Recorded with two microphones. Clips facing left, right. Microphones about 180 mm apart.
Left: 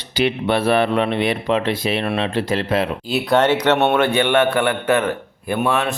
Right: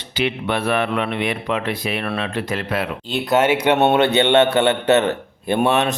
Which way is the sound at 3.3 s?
5° right (ahead or behind).